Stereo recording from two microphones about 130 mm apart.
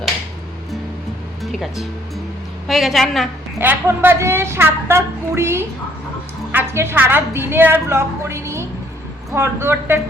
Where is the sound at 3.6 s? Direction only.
15° right (ahead or behind).